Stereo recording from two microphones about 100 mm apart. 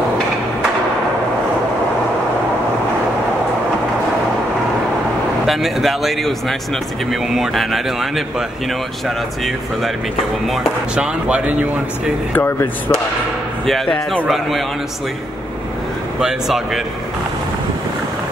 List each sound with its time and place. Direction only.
5.5 s a man's voice: centre (ahead or behind)
10.4 s a man's voice: centre (ahead or behind)
11.0 s speech: 10° right (ahead or behind)
12.4 s speech: 20° left (ahead or behind)
13.7 s a man's voice: centre (ahead or behind)
16.2 s a man's voice: 5° right (ahead or behind)